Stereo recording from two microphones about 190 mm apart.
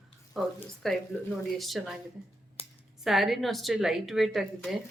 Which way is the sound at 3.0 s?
Centre (ahead or behind).